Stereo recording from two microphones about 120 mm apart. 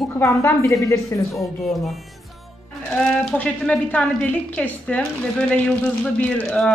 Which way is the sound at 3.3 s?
10° left (ahead or behind).